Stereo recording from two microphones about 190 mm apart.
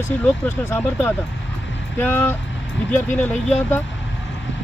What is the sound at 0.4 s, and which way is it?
Speech, 10° left (ahead or behind).